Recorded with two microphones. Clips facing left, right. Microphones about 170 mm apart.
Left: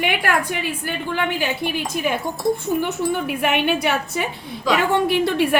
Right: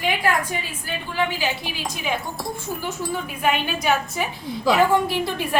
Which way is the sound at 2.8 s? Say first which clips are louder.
Left 6 dB; 70° left (ahead or behind).